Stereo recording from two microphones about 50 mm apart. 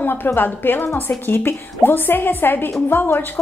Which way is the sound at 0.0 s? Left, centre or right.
Left.